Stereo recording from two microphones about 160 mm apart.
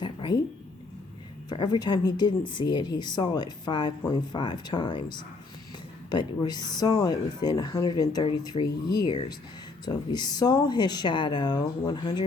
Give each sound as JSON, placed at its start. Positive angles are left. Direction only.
{"t": 0.0, "sound": "speech", "side_deg": 30}
{"t": 1.5, "sound": "speech", "side_deg": 25}